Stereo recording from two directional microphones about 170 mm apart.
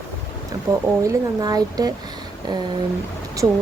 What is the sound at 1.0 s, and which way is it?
Speech, 20° right (ahead or behind).